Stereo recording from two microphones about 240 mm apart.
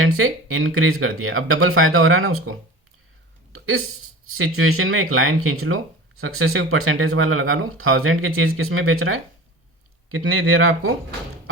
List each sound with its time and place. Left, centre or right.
0.0 s speech: right
3.5 s a sound: right
4.3 s speech: right